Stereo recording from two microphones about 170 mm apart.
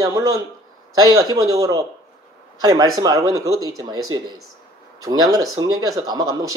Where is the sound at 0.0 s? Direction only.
20° right (ahead or behind).